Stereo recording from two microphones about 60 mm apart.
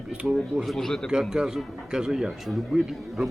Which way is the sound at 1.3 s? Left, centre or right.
Centre.